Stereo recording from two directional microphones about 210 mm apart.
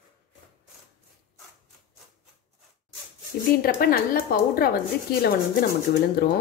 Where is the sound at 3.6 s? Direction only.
45° left (ahead or behind).